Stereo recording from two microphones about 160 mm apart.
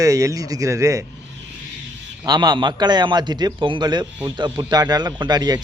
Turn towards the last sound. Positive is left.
turn(degrees=-25)  # may be behind; listen again after turning